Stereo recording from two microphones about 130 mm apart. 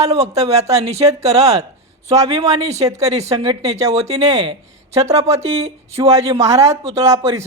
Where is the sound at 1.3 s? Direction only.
25° right (ahead or behind).